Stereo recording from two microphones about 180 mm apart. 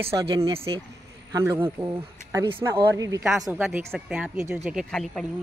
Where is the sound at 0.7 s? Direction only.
25° right (ahead or behind).